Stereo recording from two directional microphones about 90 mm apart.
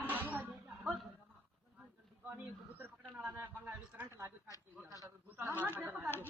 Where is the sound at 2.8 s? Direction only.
20° right (ahead or behind).